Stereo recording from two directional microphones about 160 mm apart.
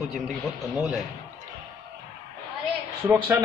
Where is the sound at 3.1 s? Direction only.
15° right (ahead or behind).